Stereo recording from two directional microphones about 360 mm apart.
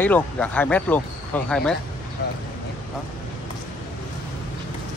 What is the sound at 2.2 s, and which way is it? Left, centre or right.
Speech, left.